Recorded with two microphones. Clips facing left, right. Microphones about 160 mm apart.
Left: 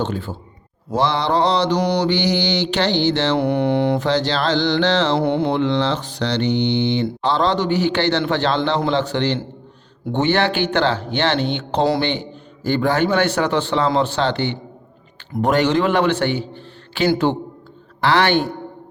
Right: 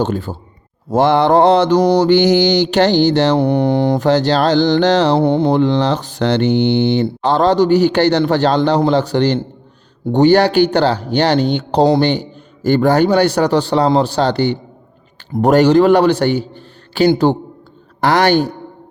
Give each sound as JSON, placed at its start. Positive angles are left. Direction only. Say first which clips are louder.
{"t": 0.0, "sound": "speech", "louder": "right 5 dB", "side_deg": -40}
{"t": 0.9, "sound": "mantra", "louder": "right 7 dB", "side_deg": -50}
{"t": 10.1, "sound": "speech", "louder": "right 8 dB", "side_deg": -40}